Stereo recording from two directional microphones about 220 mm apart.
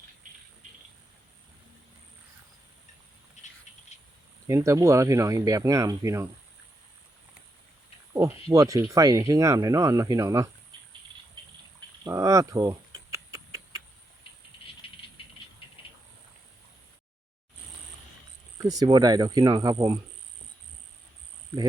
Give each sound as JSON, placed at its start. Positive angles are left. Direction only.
{"t": 4.4, "sound": "speech", "side_deg": -15}
{"t": 8.1, "sound": "speech", "side_deg": -15}
{"t": 11.4, "sound": "a sound", "side_deg": -20}
{"t": 18.6, "sound": "speech", "side_deg": -15}